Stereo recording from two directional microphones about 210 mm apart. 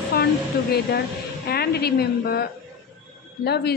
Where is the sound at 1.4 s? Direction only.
50° left (ahead or behind).